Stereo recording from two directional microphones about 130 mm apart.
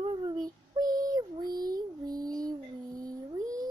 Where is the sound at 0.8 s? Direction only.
90° right.